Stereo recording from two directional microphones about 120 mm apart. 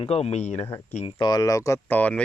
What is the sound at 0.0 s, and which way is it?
Speech, 60° left (ahead or behind).